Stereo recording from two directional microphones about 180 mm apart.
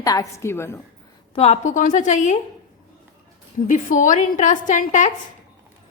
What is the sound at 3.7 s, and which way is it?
A woman's voice, 45° left (ahead or behind).